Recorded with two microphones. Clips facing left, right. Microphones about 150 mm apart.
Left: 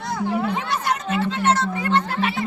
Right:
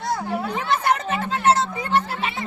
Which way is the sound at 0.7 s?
50° right (ahead or behind).